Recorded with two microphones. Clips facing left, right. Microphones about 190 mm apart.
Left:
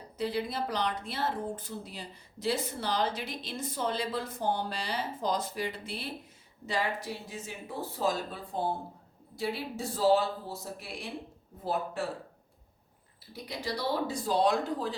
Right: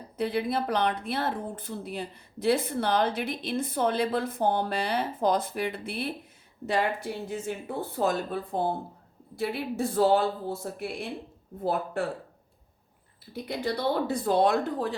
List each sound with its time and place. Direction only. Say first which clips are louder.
0.2 s speech: right 4 dB; 60° right (ahead or behind)
13.3 s speech: right 6 dB; 55° right (ahead or behind)